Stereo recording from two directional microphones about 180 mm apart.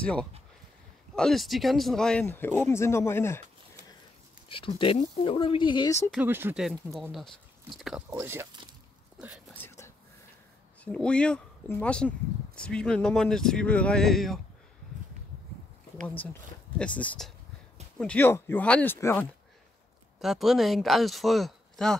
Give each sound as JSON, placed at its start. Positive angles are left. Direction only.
{"t": 0.0, "sound": "speech", "side_deg": 5}
{"t": 4.5, "sound": "speech", "side_deg": 30}
{"t": 6.1, "sound": "speech", "side_deg": -10}
{"t": 8.1, "sound": "speech", "side_deg": -15}
{"t": 9.5, "sound": "a sound", "side_deg": 15}
{"t": 10.8, "sound": "speech", "side_deg": 5}
{"t": 16.2, "sound": "speech", "side_deg": 10}
{"t": 20.2, "sound": "speech", "side_deg": 0}